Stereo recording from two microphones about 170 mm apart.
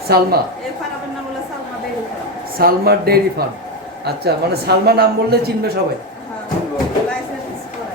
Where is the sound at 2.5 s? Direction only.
60° right (ahead or behind).